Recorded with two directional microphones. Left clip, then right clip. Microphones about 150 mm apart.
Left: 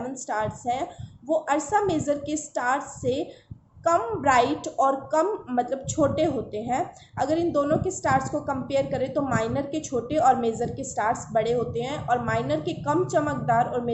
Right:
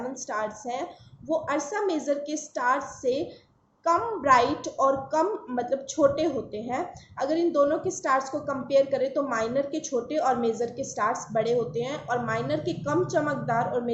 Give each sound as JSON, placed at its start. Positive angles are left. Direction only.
{"t": 0.3, "sound": "speech", "side_deg": 35}